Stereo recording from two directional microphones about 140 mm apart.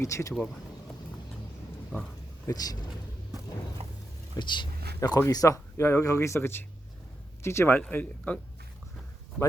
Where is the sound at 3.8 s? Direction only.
45° right (ahead or behind).